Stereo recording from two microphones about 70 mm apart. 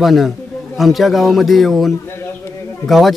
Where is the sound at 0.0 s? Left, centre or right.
Centre.